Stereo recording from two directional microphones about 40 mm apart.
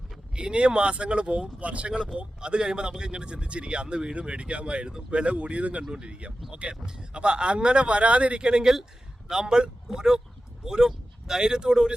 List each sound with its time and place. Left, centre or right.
0.3 s speech: right